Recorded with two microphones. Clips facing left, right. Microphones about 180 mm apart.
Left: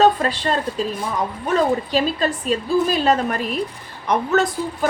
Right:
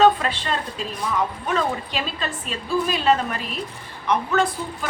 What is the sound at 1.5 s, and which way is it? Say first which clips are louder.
A woman's voice: left 7 dB; 40° left (ahead or behind).